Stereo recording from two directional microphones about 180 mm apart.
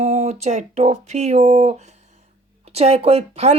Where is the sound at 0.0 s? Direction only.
35° right (ahead or behind).